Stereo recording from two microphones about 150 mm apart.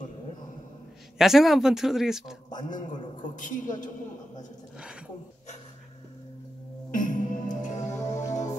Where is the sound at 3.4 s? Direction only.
60° left (ahead or behind).